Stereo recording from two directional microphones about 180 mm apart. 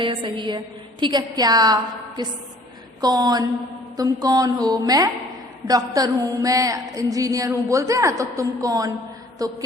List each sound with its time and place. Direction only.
0.0 s mantra: 25° right (ahead or behind)